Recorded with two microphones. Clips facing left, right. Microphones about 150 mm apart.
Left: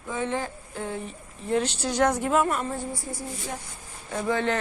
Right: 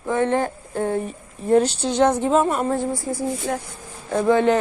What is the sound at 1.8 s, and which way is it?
Speech, 25° right (ahead or behind).